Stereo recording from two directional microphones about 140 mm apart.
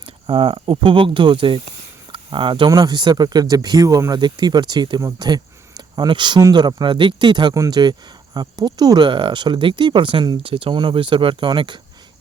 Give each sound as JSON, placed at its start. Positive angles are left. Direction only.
{"t": 0.0, "sound": "speech", "side_deg": -40}